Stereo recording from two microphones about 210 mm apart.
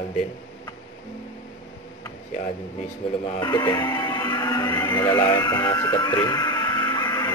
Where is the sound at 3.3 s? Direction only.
20° left (ahead or behind).